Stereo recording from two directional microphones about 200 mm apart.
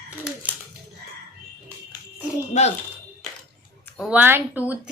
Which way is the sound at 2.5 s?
35° left (ahead or behind).